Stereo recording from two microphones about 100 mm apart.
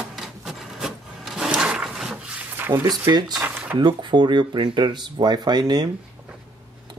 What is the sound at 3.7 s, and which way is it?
Speech, 50° right (ahead or behind).